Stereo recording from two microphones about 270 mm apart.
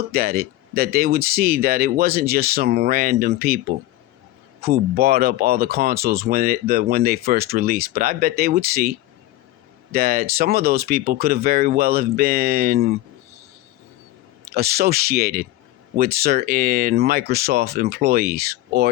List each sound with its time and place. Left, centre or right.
0.1 s speech: right
4.6 s speech: right
14.5 s speech: right